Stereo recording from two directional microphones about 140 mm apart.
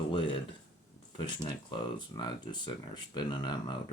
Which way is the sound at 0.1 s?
35° left (ahead or behind).